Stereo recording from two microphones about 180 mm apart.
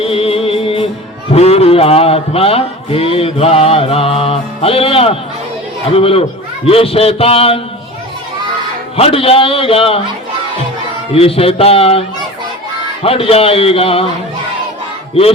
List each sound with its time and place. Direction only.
0.0 s music: 30° left (ahead or behind)
1.3 s a man's voice: 35° left (ahead or behind)
9.0 s a man's voice: 35° left (ahead or behind)
11.1 s a man's voice: 30° left (ahead or behind)